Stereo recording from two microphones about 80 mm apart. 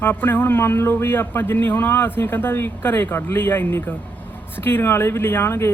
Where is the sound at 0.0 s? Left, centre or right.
Left.